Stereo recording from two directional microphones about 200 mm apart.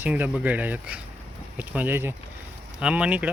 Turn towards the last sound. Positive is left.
turn(degrees=-5)  # may be behind; listen again after turning